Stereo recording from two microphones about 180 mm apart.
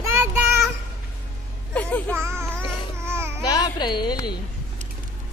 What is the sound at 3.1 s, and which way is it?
Babbling, 15° right (ahead or behind).